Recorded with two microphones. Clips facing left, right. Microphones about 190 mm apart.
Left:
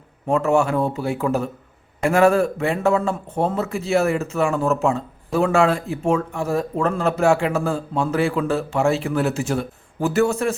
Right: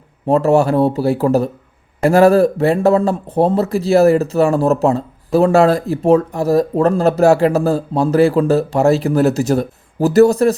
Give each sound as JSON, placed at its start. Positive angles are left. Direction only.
{"t": 0.3, "sound": "a man's voice", "side_deg": -35}